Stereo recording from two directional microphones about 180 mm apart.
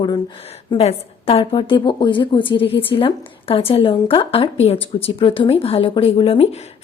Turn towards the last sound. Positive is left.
turn(degrees=35)  # may be behind; listen again after turning